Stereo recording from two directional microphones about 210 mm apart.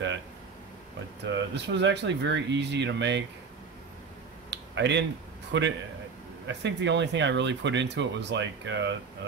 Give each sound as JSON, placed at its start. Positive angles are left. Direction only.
{"t": 1.2, "sound": "speech", "side_deg": -55}
{"t": 4.5, "sound": "a sound", "side_deg": -55}
{"t": 5.5, "sound": "speech", "side_deg": -55}